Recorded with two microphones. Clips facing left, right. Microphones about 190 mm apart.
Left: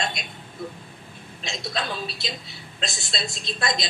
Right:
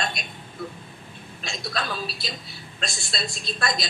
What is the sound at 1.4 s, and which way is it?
A man's voice, 20° left (ahead or behind).